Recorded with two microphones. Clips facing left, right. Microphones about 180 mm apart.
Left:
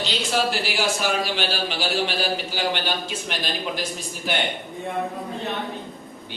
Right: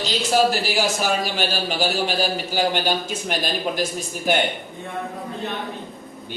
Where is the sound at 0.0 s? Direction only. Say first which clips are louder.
Right 5 dB; 40° right (ahead or behind).